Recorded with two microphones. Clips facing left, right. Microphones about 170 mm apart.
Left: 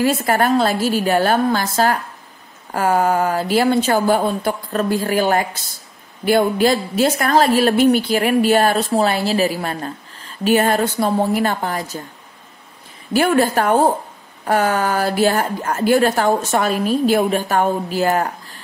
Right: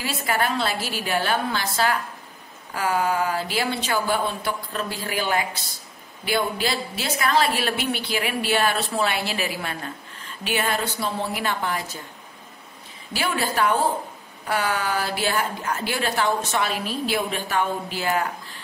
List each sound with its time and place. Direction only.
0.0 s a woman's voice: 45° left (ahead or behind)
13.1 s a woman's voice: 50° left (ahead or behind)